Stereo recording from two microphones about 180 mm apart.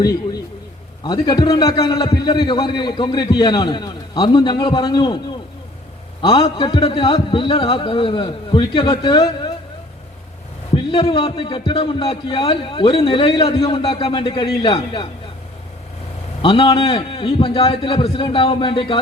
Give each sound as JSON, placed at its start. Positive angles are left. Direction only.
{"t": 1.0, "sound": "a man's voice", "side_deg": 25}
{"t": 6.2, "sound": "a man's voice", "side_deg": 30}
{"t": 10.9, "sound": "a man's voice", "side_deg": 30}
{"t": 16.4, "sound": "a man's voice", "side_deg": 30}